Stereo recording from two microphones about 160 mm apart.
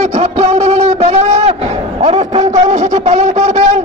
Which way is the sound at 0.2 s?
40° right (ahead or behind).